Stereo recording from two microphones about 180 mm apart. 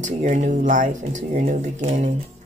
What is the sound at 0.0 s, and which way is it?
Speech, 45° right (ahead or behind).